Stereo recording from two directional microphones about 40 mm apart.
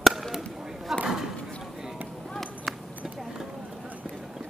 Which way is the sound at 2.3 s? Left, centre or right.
Centre.